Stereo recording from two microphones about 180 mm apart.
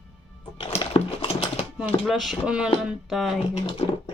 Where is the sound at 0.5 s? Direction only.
30° left (ahead or behind).